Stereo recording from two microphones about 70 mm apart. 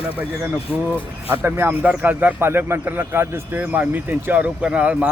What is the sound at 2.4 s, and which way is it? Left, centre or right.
Speech, right.